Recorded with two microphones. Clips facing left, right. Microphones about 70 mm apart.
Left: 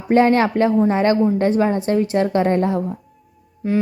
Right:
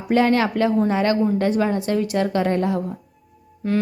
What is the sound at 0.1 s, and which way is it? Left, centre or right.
A woman's voice, left.